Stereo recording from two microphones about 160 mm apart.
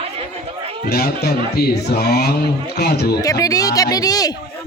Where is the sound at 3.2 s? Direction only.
20° left (ahead or behind).